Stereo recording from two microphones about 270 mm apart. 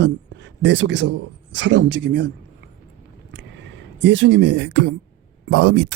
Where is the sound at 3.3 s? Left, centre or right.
Right.